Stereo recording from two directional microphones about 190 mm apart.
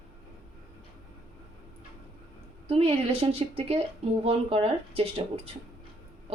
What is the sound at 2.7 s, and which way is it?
Speech, 30° right (ahead or behind).